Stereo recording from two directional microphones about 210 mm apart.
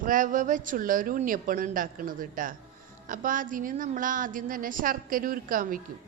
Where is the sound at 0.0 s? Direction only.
40° right (ahead or behind).